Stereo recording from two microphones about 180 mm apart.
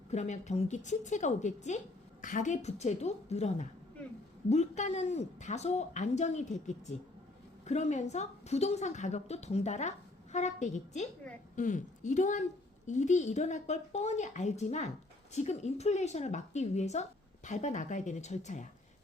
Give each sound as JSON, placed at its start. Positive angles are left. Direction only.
{"t": 0.1, "sound": "a woman's voice", "side_deg": 40}